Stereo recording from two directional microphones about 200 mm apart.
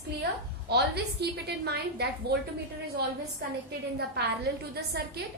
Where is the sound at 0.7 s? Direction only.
55° right (ahead or behind).